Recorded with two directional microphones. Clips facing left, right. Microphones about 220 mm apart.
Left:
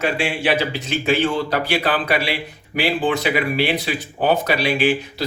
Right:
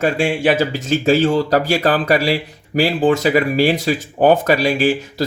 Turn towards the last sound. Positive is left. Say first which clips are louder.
# right 3 dB
turn(degrees=-45)  # may be behind; listen again after turning